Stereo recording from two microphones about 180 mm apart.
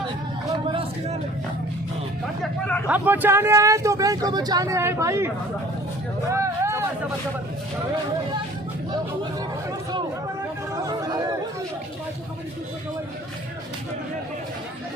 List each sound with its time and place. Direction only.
0.7 s speech: 35° right (ahead or behind)
2.4 s speech: 5° left (ahead or behind)
2.8 s speech: 10° right (ahead or behind)
6.3 s speech: 15° right (ahead or behind)
10.8 s chatter: 20° right (ahead or behind)